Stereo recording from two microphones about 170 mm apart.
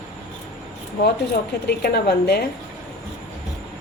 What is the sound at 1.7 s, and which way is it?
Speech, 70° left (ahead or behind).